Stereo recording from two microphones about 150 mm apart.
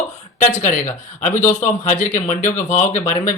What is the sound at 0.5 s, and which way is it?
Speech, 55° left (ahead or behind).